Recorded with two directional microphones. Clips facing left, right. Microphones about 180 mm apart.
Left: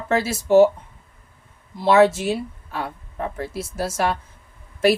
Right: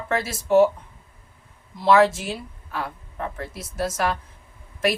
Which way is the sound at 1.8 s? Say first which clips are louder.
Left 2 dB; 25° left (ahead or behind).